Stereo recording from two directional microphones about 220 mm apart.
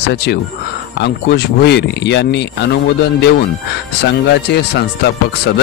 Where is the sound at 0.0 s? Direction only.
50° left (ahead or behind).